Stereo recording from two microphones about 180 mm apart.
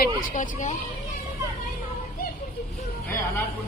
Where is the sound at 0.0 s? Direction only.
50° left (ahead or behind).